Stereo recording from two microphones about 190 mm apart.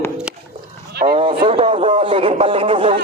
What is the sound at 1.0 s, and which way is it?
A man's voice, 25° right (ahead or behind).